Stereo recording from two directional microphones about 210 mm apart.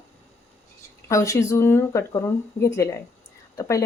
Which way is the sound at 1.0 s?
15° left (ahead or behind).